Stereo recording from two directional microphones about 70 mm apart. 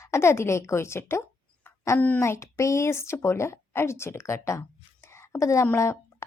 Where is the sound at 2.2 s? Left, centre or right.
Left.